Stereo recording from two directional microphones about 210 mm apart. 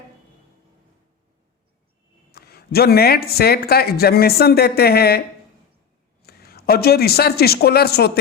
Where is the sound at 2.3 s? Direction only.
50° left (ahead or behind).